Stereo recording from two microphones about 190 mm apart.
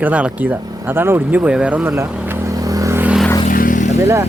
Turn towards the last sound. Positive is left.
turn(degrees=-15)  # may be behind; listen again after turning